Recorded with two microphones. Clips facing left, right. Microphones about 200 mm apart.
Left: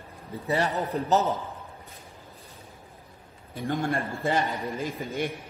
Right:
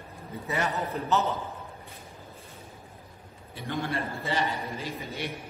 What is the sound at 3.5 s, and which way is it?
A man's voice, 50° left (ahead or behind).